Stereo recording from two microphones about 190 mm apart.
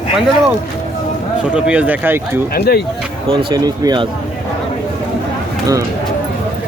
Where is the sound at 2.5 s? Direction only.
60° left (ahead or behind).